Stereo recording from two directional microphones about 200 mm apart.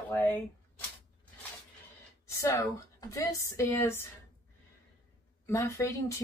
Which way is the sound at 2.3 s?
15° left (ahead or behind).